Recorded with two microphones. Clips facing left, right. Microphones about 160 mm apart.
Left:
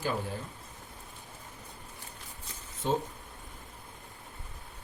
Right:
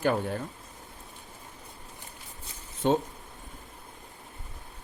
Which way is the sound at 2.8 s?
75° right (ahead or behind).